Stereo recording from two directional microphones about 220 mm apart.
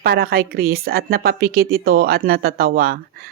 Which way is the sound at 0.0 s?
45° right (ahead or behind).